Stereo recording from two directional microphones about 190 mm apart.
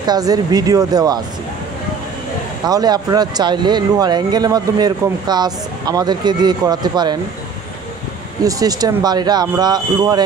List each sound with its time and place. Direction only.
0.0 s speech: 20° right (ahead or behind)
2.6 s speech: 20° right (ahead or behind)
8.5 s speech: 20° right (ahead or behind)